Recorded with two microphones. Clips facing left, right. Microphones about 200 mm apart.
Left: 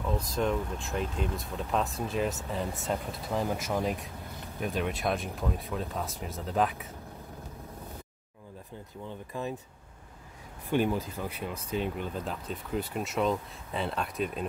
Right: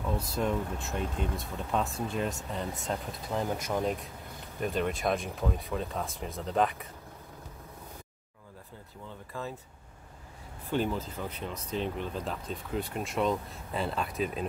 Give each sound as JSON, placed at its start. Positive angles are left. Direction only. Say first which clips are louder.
{"t": 0.2, "sound": "speech", "louder": "left 1 dB", "side_deg": -5}
{"t": 9.3, "sound": "speech", "louder": "left 3 dB", "side_deg": 15}
{"t": 10.7, "sound": "speech", "louder": "left 3 dB", "side_deg": 15}